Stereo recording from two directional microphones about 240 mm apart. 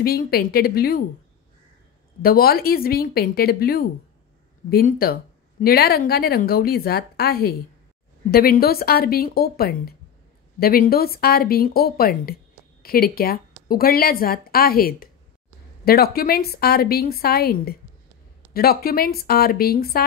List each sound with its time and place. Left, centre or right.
0.0 s speech: left
2.2 s speech: left